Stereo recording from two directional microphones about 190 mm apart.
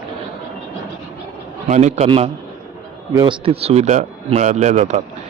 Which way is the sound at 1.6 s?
40° right (ahead or behind).